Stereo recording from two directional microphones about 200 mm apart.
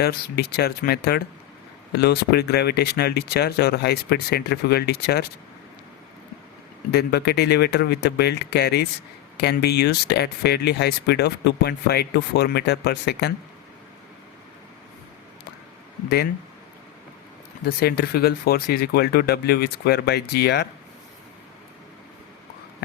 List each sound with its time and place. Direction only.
0.0 s speech: 50° left (ahead or behind)
6.9 s speech: 55° left (ahead or behind)
17.7 s speech: 50° left (ahead or behind)